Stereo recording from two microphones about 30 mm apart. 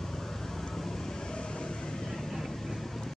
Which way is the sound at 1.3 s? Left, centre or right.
Left.